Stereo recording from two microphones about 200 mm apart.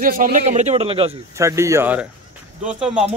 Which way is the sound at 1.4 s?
15° right (ahead or behind).